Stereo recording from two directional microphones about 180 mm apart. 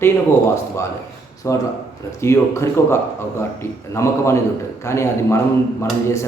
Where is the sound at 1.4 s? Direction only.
15° left (ahead or behind).